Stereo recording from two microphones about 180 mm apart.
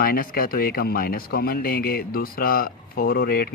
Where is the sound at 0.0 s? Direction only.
55° left (ahead or behind).